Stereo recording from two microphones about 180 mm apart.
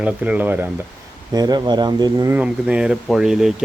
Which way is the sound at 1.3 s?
20° right (ahead or behind).